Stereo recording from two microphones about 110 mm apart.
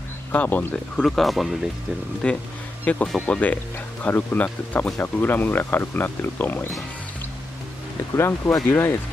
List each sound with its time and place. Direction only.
0.3 s speech: 15° left (ahead or behind)
1.0 s speech: centre (ahead or behind); by 6.7 s 15° left (ahead or behind)
8.1 s speech: 25° left (ahead or behind)